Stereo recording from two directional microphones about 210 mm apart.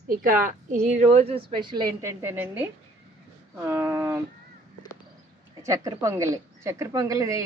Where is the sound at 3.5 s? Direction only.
10° right (ahead or behind).